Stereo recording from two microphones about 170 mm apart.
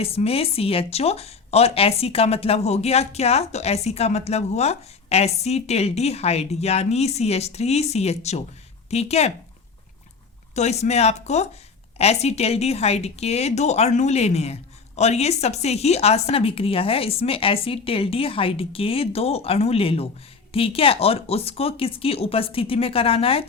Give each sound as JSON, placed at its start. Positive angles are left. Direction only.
{"t": 0.0, "sound": "speech", "side_deg": 35}
{"t": 10.5, "sound": "speech", "side_deg": 40}